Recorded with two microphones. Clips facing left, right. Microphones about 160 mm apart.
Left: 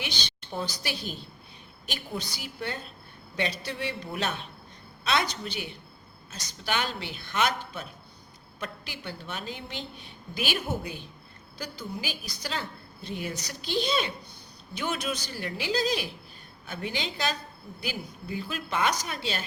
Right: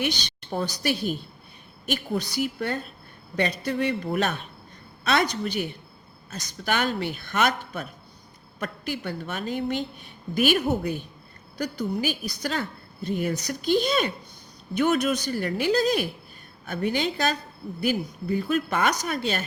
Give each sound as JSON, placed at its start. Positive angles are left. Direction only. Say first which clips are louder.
{"t": 0.5, "sound": "a woman's voice", "louder": "right 7 dB", "side_deg": -55}
{"t": 6.7, "sound": "a woman's voice", "louder": "right 5 dB", "side_deg": -50}